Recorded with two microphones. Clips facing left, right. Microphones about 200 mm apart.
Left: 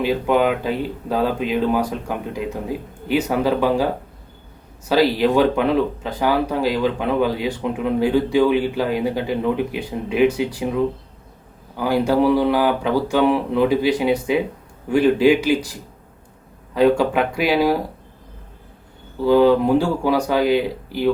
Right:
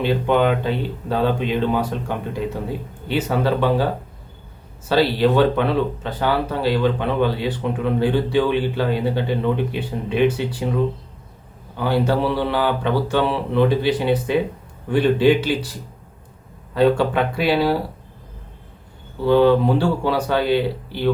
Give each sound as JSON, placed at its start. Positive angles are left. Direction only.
{"t": 0.0, "sound": "speech", "side_deg": 5}
{"t": 4.9, "sound": "speech", "side_deg": 10}
{"t": 11.8, "sound": "speech", "side_deg": 10}
{"t": 17.0, "sound": "speech", "side_deg": 10}
{"t": 19.2, "sound": "speech", "side_deg": 5}